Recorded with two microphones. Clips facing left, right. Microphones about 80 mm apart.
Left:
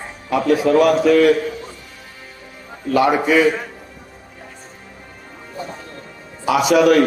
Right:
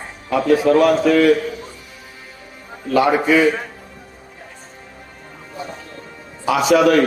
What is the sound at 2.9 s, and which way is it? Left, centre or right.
Speech, right.